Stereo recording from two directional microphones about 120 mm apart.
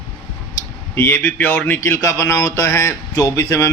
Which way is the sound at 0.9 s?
20° left (ahead or behind).